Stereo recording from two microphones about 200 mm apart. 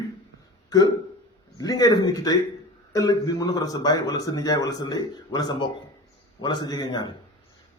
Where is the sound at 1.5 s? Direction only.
20° left (ahead or behind).